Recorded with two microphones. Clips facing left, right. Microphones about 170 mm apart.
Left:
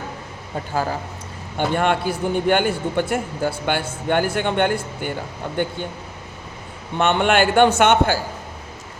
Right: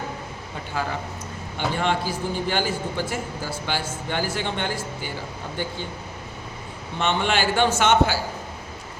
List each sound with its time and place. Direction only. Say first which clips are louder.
0.7 s speech: left 5 dB; 40° left (ahead or behind)
1.5 s a man's voice: left 5 dB; 55° left (ahead or behind)
7.0 s a man's voice: left 6 dB; 55° left (ahead or behind)